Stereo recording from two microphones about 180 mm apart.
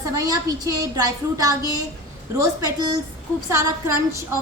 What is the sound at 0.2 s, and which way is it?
A woman's voice, 20° right (ahead or behind).